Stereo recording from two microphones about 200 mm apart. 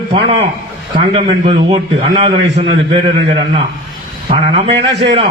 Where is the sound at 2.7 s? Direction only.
25° right (ahead or behind).